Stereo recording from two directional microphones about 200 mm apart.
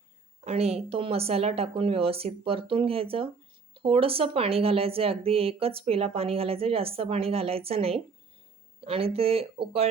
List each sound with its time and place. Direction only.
0.4 s speech: 30° right (ahead or behind)